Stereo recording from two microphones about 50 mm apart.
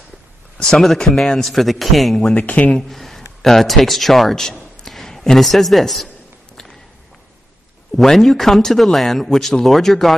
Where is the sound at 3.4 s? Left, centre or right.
Centre.